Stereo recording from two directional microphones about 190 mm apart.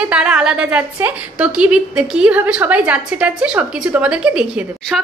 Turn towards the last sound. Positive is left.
turn(degrees=0)  # may be behind; listen again after turning